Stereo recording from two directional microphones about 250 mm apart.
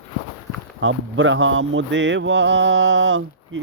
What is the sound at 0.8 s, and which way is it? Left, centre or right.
Mantra, right.